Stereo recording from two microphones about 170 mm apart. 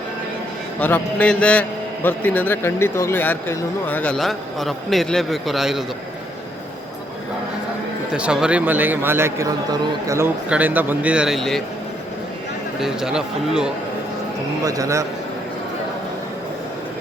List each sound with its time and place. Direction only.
0.8 s speech: 10° left (ahead or behind)
8.1 s a man's voice: 5° right (ahead or behind)
12.8 s speech: 5° right (ahead or behind)
14.6 s a man's voice: 20° right (ahead or behind)